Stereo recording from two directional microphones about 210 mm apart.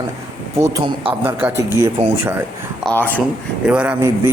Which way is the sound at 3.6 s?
5° right (ahead or behind).